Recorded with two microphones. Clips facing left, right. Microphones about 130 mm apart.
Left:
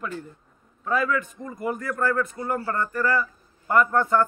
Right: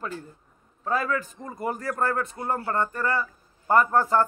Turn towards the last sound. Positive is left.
turn(degrees=-35)  # may be behind; listen again after turning